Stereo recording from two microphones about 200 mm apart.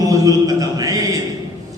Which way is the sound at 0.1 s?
15° right (ahead or behind).